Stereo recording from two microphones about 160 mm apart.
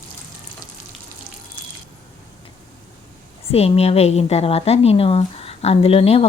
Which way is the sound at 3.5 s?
40° left (ahead or behind).